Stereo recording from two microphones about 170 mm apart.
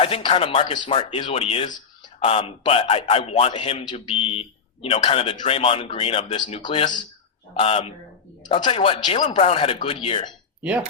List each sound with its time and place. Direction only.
0.0 s a man's voice: 35° left (ahead or behind)